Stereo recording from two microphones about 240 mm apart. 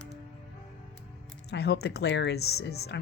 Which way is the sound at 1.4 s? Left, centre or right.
Left.